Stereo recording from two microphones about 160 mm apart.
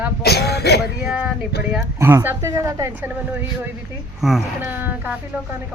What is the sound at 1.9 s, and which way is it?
A woman's voice, 15° right (ahead or behind).